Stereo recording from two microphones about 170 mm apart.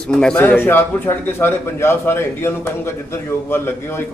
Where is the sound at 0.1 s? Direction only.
5° left (ahead or behind).